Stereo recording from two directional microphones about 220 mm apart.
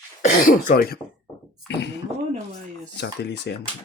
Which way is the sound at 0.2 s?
35° left (ahead or behind).